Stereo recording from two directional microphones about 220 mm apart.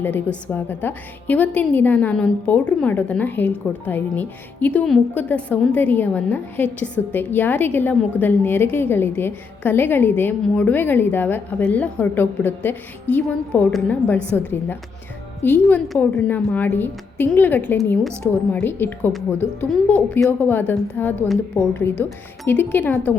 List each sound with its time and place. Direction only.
0.0 s a woman's voice: 10° left (ahead or behind)